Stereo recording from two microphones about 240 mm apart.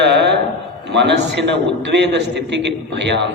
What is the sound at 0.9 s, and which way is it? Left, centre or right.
A man's voice, right.